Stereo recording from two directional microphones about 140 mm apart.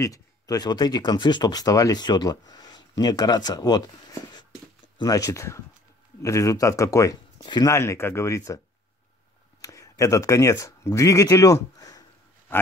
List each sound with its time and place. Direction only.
0.0 s speech: 25° left (ahead or behind)
7.7 s speech: 20° left (ahead or behind)
9.6 s speech: 25° left (ahead or behind)